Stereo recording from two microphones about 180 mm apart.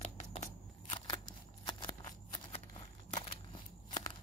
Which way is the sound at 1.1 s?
25° left (ahead or behind).